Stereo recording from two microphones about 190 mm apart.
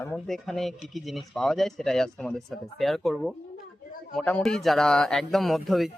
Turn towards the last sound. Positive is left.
turn(degrees=0)  # may be behind; listen again after turning